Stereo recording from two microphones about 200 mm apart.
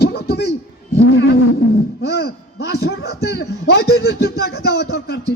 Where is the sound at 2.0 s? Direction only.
55° left (ahead or behind).